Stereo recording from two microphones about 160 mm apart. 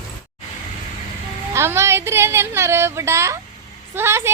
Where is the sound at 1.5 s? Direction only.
15° right (ahead or behind).